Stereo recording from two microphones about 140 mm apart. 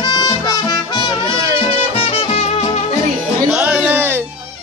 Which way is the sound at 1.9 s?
45° left (ahead or behind).